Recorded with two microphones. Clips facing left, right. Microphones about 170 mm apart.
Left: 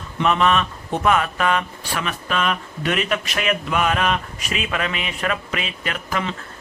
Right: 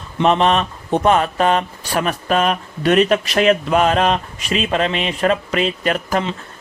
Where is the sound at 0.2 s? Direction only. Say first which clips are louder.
Right 4 dB; 30° right (ahead or behind).